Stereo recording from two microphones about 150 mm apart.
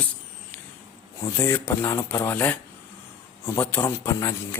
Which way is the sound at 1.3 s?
15° left (ahead or behind).